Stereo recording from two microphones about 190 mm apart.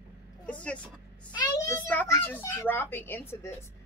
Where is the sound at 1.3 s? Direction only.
10° left (ahead or behind).